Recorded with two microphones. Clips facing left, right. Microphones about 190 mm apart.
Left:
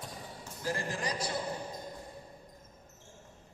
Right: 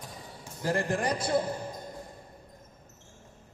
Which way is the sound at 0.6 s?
55° right (ahead or behind).